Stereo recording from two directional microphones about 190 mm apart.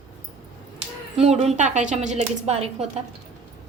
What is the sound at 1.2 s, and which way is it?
A woman's voice, 35° right (ahead or behind).